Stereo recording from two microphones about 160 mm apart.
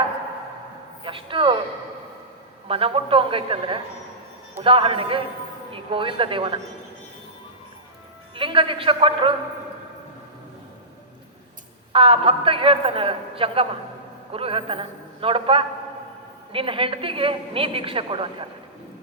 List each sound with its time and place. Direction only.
1.0 s a sound: 35° right (ahead or behind)
2.6 s a woman's voice: 35° right (ahead or behind)
8.4 s a woman's voice: 35° right (ahead or behind)
11.9 s a woman's voice: 35° right (ahead or behind)